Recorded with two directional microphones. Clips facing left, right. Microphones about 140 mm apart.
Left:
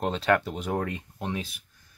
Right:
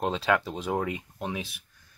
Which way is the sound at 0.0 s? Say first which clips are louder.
Left 1 dB; 10° right (ahead or behind).